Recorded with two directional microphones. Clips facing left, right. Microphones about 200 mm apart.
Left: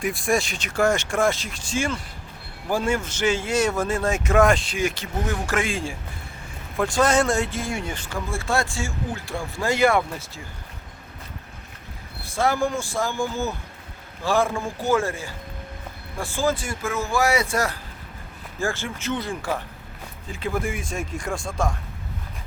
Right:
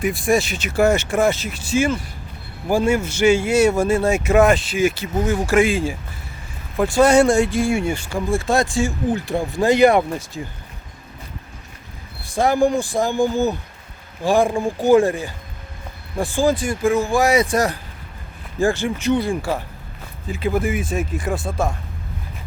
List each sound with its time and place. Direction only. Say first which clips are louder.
0.0 s speech: right 5 dB; centre (ahead or behind); by 10.4 s 15° right (ahead or behind)
12.2 s speech: right 6 dB; 15° right (ahead or behind)